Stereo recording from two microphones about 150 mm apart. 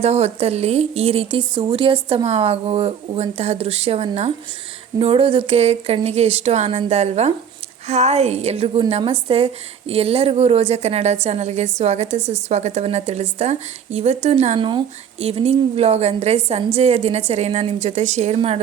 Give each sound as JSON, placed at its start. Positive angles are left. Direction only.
{"t": 0.0, "sound": "a woman's voice", "side_deg": -45}